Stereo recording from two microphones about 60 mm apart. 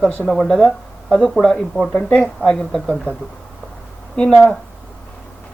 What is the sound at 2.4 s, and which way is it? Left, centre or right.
Speech, centre.